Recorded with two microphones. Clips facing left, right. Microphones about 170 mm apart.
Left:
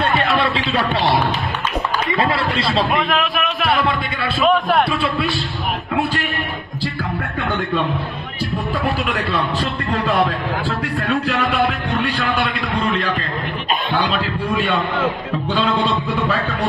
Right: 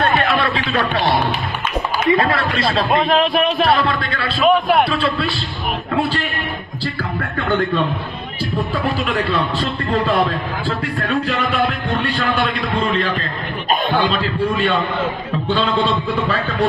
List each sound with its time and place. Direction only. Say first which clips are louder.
2.3 s speech: right 1 dB; 25° left (ahead or behind)
2.9 s a man's voice: right 4 dB; 30° right (ahead or behind)
3.8 s speech: even; 15° left (ahead or behind)
4.5 s music: right 2 dB; centre (ahead or behind)
11.2 s music: left 1 dB; centre (ahead or behind)